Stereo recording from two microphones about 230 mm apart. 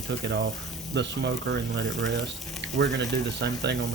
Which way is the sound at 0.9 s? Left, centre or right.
Right.